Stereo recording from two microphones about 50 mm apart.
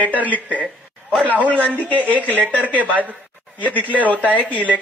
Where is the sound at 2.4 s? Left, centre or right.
Right.